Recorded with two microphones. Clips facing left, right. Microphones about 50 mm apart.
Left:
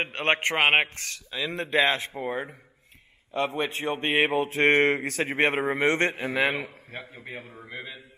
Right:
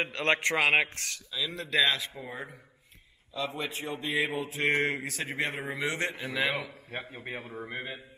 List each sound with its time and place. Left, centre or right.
0.0 s a man's voice: left
2.2 s mantra: left
6.9 s a man's voice: right